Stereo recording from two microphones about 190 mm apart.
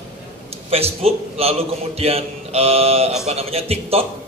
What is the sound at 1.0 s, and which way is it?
A man's voice, 30° right (ahead or behind).